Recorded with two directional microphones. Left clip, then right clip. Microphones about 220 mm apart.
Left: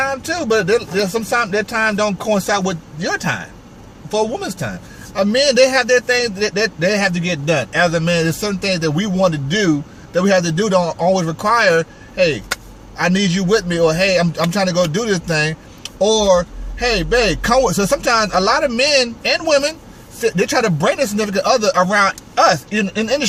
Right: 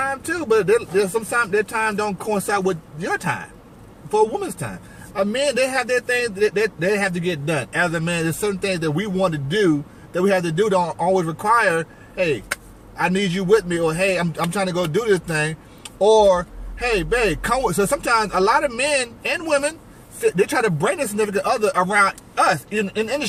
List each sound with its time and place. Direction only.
0.6 s a man's voice: 15° left (ahead or behind)